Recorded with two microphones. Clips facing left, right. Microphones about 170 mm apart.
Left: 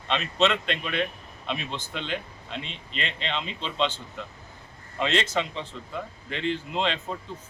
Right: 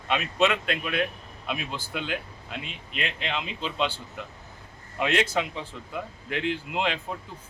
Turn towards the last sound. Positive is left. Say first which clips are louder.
# left 1 dB
turn(degrees=-10)  # may be behind; listen again after turning